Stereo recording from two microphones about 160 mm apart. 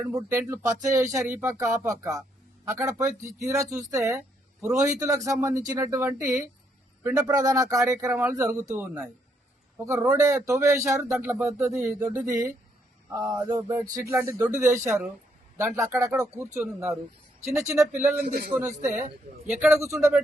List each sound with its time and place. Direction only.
0.0 s a man's voice: 20° right (ahead or behind)
10.1 s a man's voice: 20° right (ahead or behind)
16.6 s speech: 5° right (ahead or behind)
17.4 s a man's voice: 20° right (ahead or behind)
18.9 s a man's voice: 50° right (ahead or behind)
19.5 s speech: 10° right (ahead or behind)